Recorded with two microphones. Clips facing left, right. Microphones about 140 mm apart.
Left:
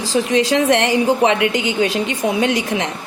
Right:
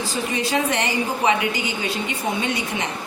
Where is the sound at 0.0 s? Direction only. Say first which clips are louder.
Left 8 dB; 90° left.